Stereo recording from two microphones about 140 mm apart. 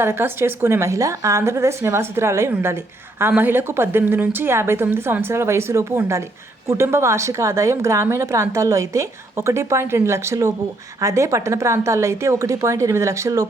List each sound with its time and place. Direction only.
0.0 s a woman's voice: 15° right (ahead or behind)